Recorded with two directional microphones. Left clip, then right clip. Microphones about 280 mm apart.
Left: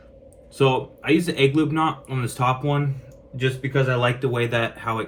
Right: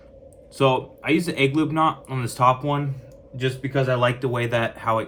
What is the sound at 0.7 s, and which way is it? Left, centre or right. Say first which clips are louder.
Speech: left 1 dB; right.